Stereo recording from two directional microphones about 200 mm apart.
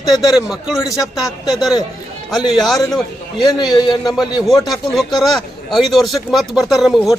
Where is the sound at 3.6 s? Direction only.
20° left (ahead or behind).